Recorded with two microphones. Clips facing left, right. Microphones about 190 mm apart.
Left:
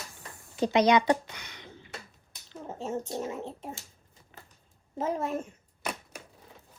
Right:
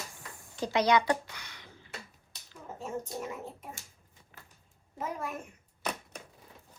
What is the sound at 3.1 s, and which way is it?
Speech, 30° left (ahead or behind).